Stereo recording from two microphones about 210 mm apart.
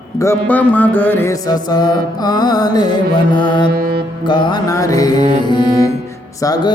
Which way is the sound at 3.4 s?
20° left (ahead or behind).